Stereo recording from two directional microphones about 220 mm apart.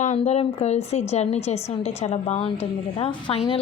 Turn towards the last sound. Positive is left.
turn(degrees=25)  # may be behind; listen again after turning